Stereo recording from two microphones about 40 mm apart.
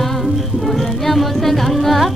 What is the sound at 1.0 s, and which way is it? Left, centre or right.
Music, centre.